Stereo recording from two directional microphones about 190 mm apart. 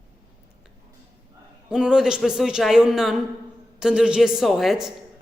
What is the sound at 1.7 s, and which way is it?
A man's voice, 5° right (ahead or behind).